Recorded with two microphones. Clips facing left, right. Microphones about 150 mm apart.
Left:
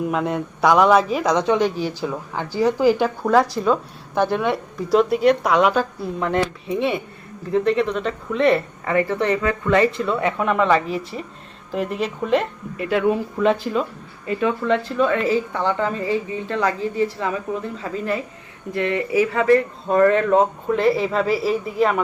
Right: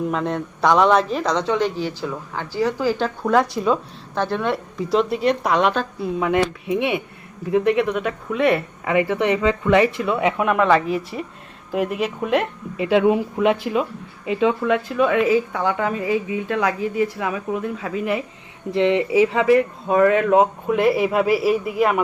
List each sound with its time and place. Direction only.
0.1 s speech: 5° left (ahead or behind)
3.2 s a woman's voice: centre (ahead or behind)
4.1 s a woman's voice: 10° left (ahead or behind); by 12.5 s 10° right (ahead or behind)
12.7 s a woman's voice: 20° right (ahead or behind)